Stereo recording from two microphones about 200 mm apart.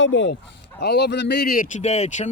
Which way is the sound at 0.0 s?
65° left (ahead or behind).